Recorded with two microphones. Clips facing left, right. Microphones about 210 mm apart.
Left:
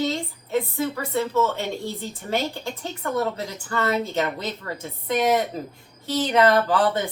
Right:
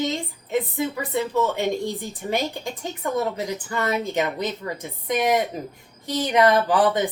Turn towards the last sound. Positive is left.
turn(degrees=-15)  # may be behind; listen again after turning